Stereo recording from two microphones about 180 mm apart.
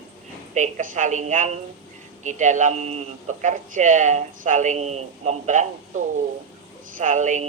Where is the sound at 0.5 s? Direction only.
45° right (ahead or behind).